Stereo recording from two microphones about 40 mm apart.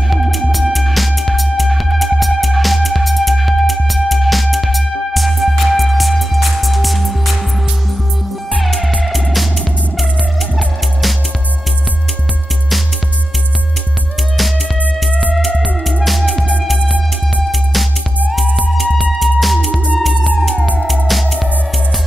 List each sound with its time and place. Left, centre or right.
0.1 s music: centre
8.5 s music: centre
16.0 s music: centre
18.7 s music: centre
20.5 s music: left
20.8 s music: centre